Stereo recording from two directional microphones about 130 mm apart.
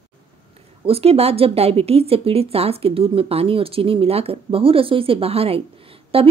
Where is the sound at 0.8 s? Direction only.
50° right (ahead or behind).